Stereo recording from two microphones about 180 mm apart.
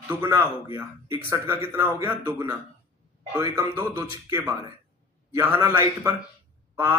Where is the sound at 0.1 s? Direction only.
15° right (ahead or behind).